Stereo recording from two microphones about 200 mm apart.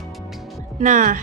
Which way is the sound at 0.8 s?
40° right (ahead or behind).